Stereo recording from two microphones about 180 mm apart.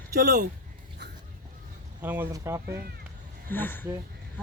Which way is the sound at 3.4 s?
10° left (ahead or behind).